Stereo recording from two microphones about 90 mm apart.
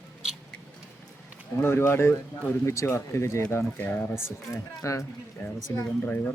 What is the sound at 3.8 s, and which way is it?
Speech, 20° left (ahead or behind).